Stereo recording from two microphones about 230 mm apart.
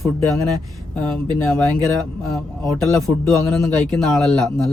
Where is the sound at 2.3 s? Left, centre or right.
Centre.